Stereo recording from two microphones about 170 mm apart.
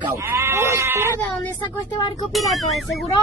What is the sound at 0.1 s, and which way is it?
Sheep, 15° right (ahead or behind).